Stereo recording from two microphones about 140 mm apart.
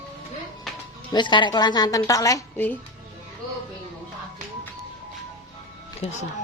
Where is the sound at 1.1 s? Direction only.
35° left (ahead or behind).